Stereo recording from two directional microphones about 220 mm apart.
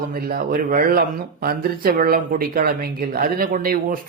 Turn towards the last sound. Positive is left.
turn(degrees=-40)  # may be behind; listen again after turning